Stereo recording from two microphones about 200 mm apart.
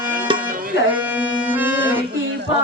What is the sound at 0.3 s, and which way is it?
Tabla, 25° right (ahead or behind).